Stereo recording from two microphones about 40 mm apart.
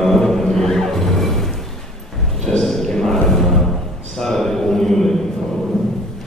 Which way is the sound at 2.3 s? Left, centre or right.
Centre.